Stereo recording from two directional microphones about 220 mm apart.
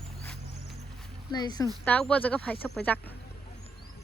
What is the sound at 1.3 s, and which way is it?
Speech, 20° left (ahead or behind).